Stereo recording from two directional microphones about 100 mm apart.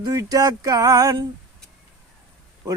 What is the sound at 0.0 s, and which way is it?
A man's voice, 35° right (ahead or behind).